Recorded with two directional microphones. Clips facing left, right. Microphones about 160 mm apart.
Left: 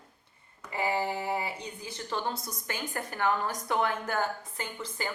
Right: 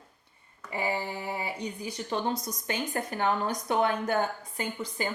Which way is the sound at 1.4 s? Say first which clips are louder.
Right 3 dB; 20° right (ahead or behind).